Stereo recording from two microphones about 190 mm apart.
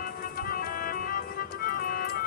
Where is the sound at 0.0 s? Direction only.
50° left (ahead or behind).